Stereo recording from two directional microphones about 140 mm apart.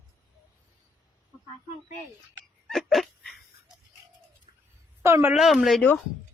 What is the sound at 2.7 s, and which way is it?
Dog, centre (ahead or behind).